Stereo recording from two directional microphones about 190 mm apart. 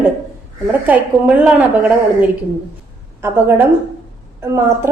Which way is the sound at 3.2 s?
10° right (ahead or behind).